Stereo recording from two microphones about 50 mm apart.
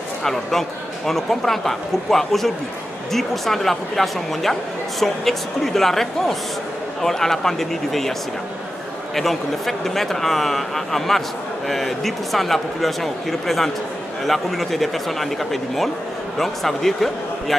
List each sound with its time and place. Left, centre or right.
0.2 s a man's voice: centre
9.1 s speech: centre